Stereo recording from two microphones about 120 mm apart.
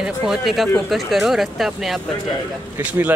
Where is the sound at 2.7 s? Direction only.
20° right (ahead or behind).